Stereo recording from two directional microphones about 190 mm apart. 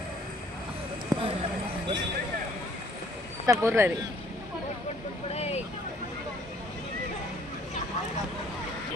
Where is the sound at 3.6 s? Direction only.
15° right (ahead or behind).